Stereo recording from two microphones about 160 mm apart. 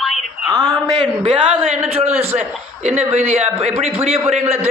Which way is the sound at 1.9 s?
40° right (ahead or behind).